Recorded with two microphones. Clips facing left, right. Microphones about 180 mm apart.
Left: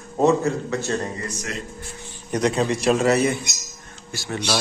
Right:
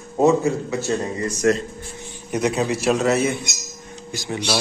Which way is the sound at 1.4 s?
55° right (ahead or behind).